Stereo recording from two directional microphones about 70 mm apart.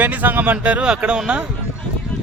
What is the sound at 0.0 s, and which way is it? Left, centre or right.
Speech, right.